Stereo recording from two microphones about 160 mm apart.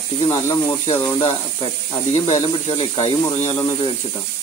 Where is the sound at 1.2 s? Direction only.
35° left (ahead or behind).